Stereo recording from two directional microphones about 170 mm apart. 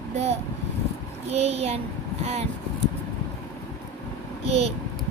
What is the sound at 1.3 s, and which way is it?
Speech, 40° right (ahead or behind).